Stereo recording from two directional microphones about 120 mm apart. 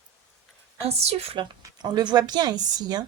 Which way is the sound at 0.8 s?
60° right (ahead or behind).